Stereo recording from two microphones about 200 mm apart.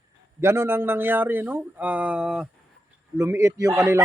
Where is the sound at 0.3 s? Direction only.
10° right (ahead or behind).